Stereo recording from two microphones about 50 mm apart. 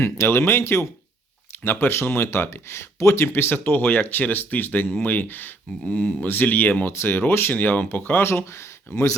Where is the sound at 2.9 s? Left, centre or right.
Left.